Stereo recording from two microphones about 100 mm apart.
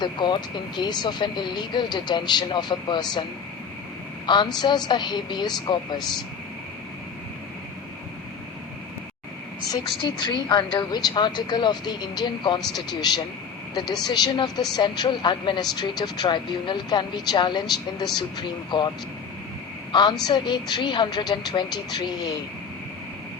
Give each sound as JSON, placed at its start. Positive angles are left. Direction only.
{"t": 0.0, "sound": "speech", "side_deg": 50}
{"t": 4.3, "sound": "speech", "side_deg": 50}
{"t": 10.0, "sound": "speech", "side_deg": 50}
{"t": 19.9, "sound": "speech", "side_deg": 50}